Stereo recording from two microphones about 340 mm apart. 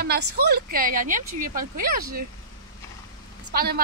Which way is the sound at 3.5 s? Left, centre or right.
Right.